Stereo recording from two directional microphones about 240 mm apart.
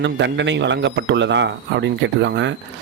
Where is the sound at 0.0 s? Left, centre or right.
Right.